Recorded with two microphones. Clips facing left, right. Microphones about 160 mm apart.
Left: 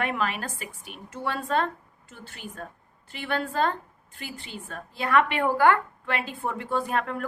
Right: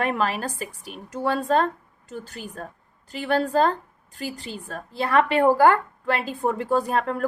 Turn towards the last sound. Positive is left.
turn(degrees=-40)  # may be behind; listen again after turning